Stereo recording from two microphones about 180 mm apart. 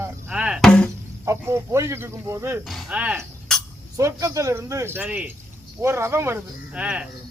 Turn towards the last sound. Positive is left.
turn(degrees=-5)  # may be behind; listen again after turning